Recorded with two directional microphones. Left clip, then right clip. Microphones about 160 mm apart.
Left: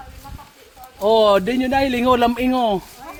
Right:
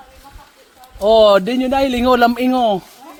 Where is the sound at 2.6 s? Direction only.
40° right (ahead or behind).